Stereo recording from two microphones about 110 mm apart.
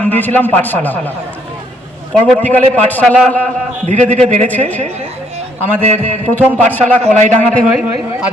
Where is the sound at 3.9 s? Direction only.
90° right.